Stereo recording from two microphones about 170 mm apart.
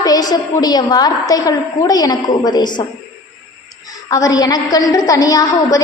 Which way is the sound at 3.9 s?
20° left (ahead or behind).